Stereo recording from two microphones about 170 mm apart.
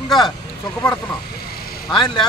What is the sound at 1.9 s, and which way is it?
Speech, 25° left (ahead or behind).